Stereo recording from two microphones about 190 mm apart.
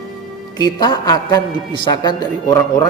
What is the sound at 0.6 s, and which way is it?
A man's voice, 20° left (ahead or behind).